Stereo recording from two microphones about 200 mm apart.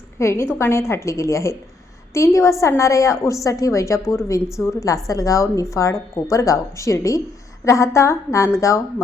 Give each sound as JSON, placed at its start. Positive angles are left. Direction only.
{"t": 0.2, "sound": "a woman's voice", "side_deg": 15}